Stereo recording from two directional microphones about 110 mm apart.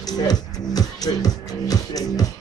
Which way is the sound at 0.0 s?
35° left (ahead or behind).